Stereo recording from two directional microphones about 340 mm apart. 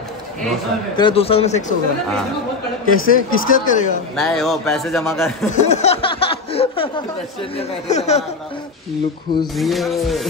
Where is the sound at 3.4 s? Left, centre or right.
Left.